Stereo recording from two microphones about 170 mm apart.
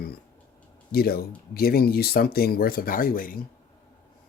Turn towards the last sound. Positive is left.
turn(degrees=55)  # may be behind; listen again after turning